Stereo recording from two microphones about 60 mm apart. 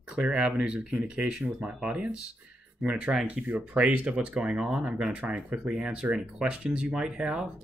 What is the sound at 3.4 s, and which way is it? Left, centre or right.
Speech, right.